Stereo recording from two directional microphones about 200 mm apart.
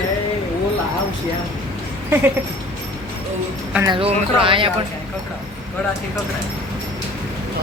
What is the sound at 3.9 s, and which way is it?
Speech, 25° right (ahead or behind).